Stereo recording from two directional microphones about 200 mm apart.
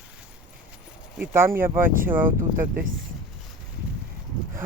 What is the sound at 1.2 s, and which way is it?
Speech, 10° right (ahead or behind).